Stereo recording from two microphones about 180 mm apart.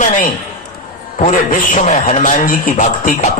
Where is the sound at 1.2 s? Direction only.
45° left (ahead or behind).